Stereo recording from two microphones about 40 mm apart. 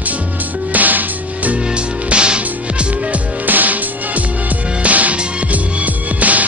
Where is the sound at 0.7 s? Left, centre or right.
Right.